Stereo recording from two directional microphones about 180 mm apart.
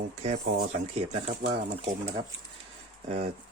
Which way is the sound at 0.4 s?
60° right (ahead or behind).